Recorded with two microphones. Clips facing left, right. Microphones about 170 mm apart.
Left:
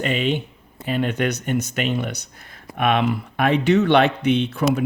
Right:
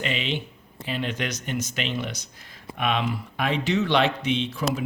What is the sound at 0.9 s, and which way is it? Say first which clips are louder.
Speech: left 7 dB; 50° left (ahead or behind).